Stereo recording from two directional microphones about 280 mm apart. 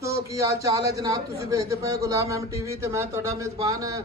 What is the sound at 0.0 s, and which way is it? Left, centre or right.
A man's voice, centre.